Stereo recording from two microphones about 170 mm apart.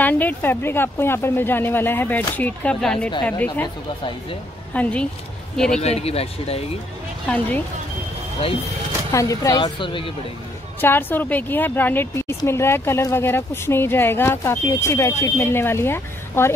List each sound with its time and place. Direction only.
0.0 s a woman's voice: 10° left (ahead or behind)
3.6 s speech: 30° left (ahead or behind)
4.7 s a woman's voice: 10° left (ahead or behind)
5.8 s speech: 40° left (ahead or behind)
7.2 s a woman's voice: 10° left (ahead or behind)
9.1 s speech: 20° left (ahead or behind)
10.8 s a woman's voice: 10° left (ahead or behind)